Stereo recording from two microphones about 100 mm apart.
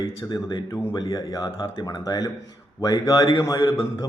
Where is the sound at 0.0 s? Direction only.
40° left (ahead or behind).